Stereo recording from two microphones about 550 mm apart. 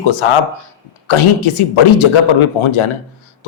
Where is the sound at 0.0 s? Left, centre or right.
Left.